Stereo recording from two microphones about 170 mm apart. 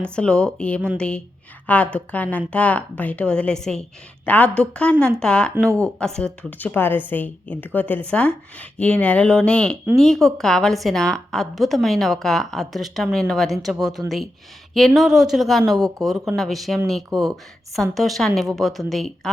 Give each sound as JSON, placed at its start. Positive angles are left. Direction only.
{"t": 0.0, "sound": "a woman's voice", "side_deg": 5}
{"t": 5.6, "sound": "speech", "side_deg": -15}
{"t": 6.0, "sound": "a woman's voice", "side_deg": 5}